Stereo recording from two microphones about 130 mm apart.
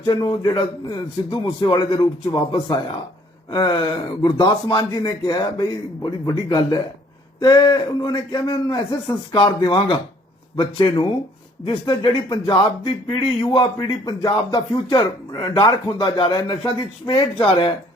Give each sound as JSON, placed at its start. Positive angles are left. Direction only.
{"t": 0.0, "sound": "speech", "side_deg": 30}